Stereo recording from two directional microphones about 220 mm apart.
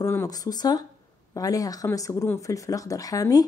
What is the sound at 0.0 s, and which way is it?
Speech, 15° left (ahead or behind).